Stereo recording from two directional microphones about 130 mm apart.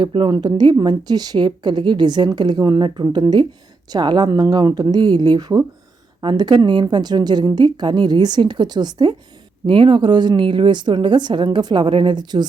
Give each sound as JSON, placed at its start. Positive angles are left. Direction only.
{"t": 0.0, "sound": "a woman's voice", "side_deg": -35}